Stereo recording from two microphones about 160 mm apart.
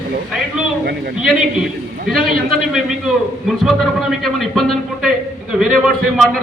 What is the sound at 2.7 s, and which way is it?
A man's voice, centre (ahead or behind).